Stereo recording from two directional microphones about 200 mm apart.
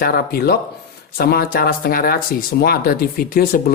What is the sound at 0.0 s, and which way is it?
A woman's voice, 50° left (ahead or behind).